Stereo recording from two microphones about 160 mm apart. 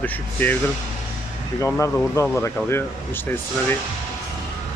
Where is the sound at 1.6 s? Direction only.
20° left (ahead or behind).